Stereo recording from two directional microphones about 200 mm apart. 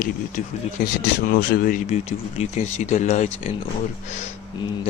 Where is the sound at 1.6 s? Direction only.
40° left (ahead or behind).